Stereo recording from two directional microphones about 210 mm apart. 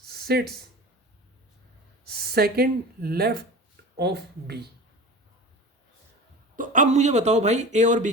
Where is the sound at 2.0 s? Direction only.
45° right (ahead or behind).